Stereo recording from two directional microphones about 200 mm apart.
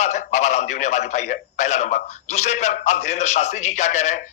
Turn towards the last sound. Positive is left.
turn(degrees=35)  # may be behind; listen again after turning